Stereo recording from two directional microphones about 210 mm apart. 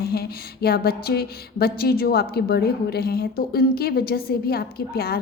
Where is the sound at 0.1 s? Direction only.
45° left (ahead or behind).